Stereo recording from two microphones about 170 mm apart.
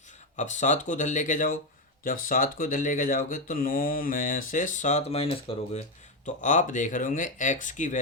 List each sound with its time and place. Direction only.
0.3 s speech: 45° left (ahead or behind)
6.2 s speech: 45° left (ahead or behind)